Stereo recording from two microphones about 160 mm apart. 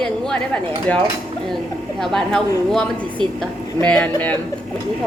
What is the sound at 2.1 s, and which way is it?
A woman's voice, 5° left (ahead or behind).